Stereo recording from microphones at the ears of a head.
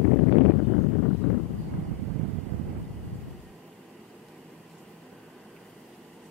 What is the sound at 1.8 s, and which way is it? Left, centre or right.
Vehicle, right.